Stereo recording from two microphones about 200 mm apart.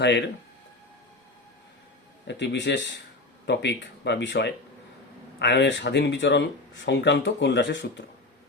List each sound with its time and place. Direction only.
0.0 s speech: 60° left (ahead or behind)
2.2 s speech: 60° left (ahead or behind)